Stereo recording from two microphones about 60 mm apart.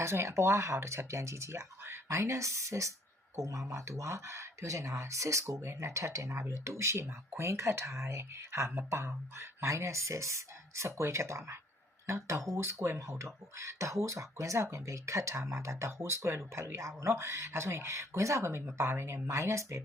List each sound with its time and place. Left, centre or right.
0.0 s speech: right